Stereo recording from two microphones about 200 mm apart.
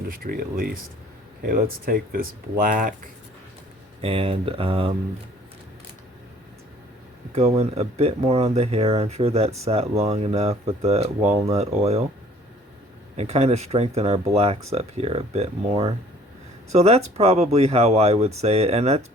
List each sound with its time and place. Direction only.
0.1 s speech: 45° right (ahead or behind)
4.0 s speech: 25° right (ahead or behind)
7.3 s speech: 30° right (ahead or behind)
13.1 s speech: 30° right (ahead or behind)